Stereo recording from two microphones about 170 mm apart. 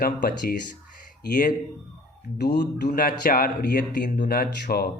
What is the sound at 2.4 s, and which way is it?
Speech, 75° left (ahead or behind).